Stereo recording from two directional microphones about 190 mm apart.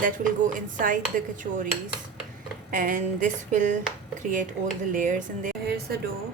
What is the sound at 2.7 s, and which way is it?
A woman's voice, 45° right (ahead or behind).